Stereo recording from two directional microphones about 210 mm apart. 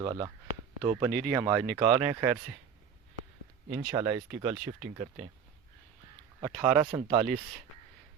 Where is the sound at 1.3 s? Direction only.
10° right (ahead or behind).